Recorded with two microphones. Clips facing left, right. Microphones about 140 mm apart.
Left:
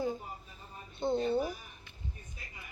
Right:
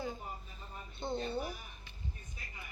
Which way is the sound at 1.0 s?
15° left (ahead or behind).